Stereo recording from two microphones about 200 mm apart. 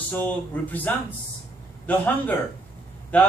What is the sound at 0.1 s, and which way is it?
Speech, 10° left (ahead or behind).